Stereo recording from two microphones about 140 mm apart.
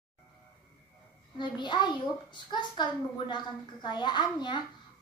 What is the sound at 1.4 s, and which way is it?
A child's voice, 35° left (ahead or behind).